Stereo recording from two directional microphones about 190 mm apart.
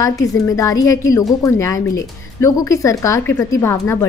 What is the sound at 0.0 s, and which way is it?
Speech, 15° left (ahead or behind).